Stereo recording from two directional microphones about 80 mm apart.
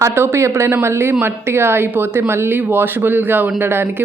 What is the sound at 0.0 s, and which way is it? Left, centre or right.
Speech, right.